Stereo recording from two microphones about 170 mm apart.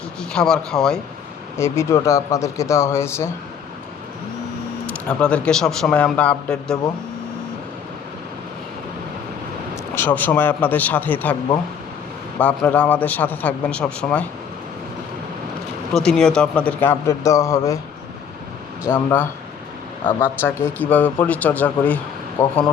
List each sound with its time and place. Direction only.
0.2 s speech: 5° left (ahead or behind)
1.5 s speech: 15° left (ahead or behind)
4.9 s speech: 5° left (ahead or behind)
9.9 s speech: 10° left (ahead or behind)
12.4 s speech: 10° left (ahead or behind)
15.9 s speech: centre (ahead or behind); by 17.6 s 20° left (ahead or behind)
18.9 s speech: 10° left (ahead or behind)